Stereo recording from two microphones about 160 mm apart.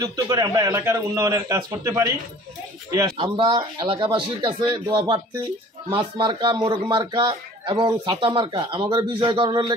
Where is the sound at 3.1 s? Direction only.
30° right (ahead or behind).